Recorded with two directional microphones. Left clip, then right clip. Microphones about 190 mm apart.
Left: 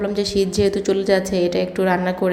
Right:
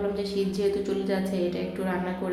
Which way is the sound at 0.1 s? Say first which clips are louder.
Left 8 dB; 40° left (ahead or behind).